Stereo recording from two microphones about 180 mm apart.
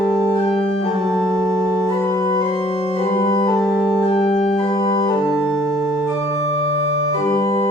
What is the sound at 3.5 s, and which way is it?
Organ, 25° left (ahead or behind).